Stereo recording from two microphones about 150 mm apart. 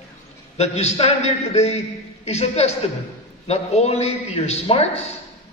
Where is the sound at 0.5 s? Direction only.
45° left (ahead or behind).